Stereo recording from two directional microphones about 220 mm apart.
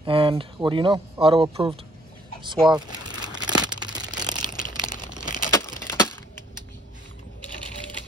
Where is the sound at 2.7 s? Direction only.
20° right (ahead or behind).